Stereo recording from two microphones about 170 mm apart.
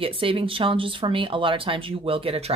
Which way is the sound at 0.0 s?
30° right (ahead or behind).